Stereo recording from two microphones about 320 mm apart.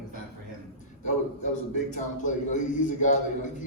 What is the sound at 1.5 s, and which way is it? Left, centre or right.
A man's voice, left.